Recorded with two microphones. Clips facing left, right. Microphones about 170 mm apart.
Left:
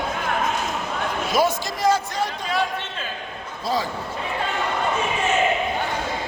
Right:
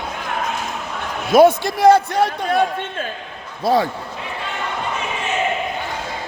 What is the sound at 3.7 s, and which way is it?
Speech, 60° right (ahead or behind).